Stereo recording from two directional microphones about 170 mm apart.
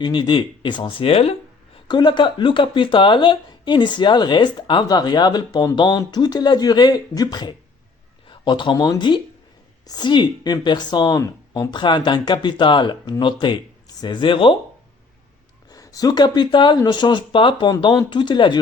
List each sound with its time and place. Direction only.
0.0 s a woman's voice: 30° left (ahead or behind)
15.7 s a woman's voice: 20° left (ahead or behind)